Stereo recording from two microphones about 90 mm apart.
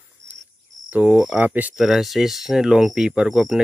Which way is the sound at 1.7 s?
5° right (ahead or behind).